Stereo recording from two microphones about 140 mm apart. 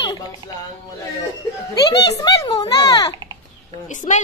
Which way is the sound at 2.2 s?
30° left (ahead or behind).